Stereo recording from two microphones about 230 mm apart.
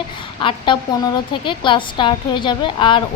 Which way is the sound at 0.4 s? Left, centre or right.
Left.